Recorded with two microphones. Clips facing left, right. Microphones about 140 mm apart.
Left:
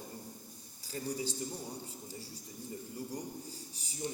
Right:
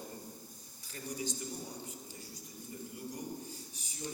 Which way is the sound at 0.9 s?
35° left (ahead or behind).